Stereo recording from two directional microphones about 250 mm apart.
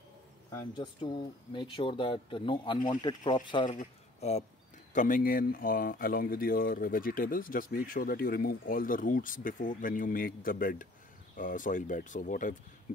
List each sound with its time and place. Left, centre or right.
0.5 s speech: centre